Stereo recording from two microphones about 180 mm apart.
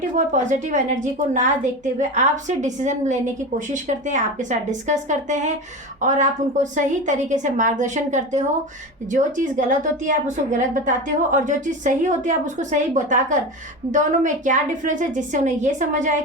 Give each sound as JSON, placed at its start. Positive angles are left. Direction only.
{"t": 0.3, "sound": "a woman's voice", "side_deg": -40}